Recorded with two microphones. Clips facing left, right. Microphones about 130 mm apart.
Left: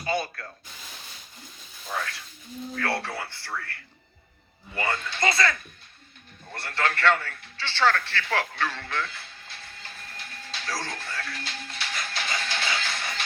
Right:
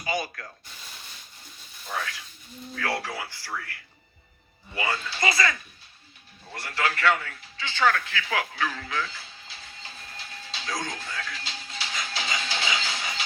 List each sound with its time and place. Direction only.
0.0 s a man's voice: 10° right (ahead or behind)
2.7 s a man's voice: 10° right (ahead or behind)
6.5 s a man's voice: 5° right (ahead or behind)
10.6 s a man's voice: 20° right (ahead or behind)
11.3 s music: 55° left (ahead or behind)
11.9 s music: 15° right (ahead or behind)